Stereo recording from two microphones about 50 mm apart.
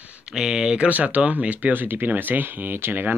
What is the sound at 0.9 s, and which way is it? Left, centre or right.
Speech, right.